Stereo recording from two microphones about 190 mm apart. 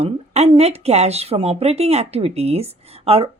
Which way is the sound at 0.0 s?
35° right (ahead or behind).